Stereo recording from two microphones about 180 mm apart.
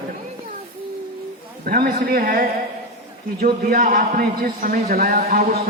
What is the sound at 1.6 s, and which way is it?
A man's voice, 55° right (ahead or behind).